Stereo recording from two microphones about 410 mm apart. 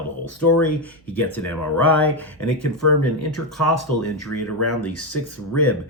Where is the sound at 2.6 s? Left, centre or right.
Left.